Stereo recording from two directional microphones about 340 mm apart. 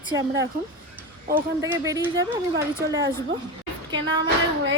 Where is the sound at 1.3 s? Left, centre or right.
Centre.